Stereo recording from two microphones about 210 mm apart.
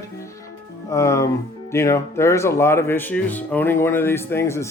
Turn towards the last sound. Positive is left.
turn(degrees=10)  # may be behind; listen again after turning